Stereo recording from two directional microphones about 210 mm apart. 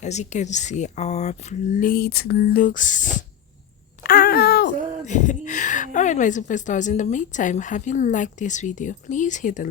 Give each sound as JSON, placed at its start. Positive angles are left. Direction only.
{"t": 0.0, "sound": "a woman's voice", "side_deg": 35}
{"t": 4.0, "sound": "a sound", "side_deg": 45}
{"t": 5.0, "sound": "a woman's voice", "side_deg": 35}